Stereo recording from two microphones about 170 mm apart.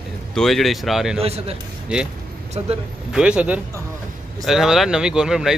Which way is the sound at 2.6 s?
35° right (ahead or behind).